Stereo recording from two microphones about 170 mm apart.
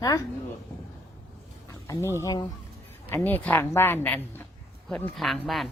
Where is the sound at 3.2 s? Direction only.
10° left (ahead or behind).